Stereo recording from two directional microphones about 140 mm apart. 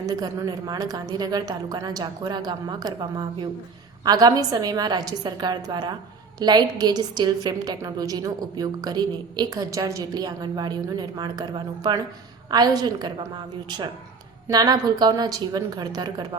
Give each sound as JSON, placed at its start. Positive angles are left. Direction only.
{"t": 0.0, "sound": "a woman's voice", "side_deg": -25}